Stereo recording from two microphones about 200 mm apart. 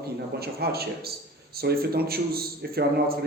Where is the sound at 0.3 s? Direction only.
50° right (ahead or behind).